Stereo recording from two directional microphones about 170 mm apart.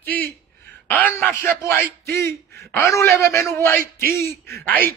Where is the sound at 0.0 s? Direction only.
10° left (ahead or behind).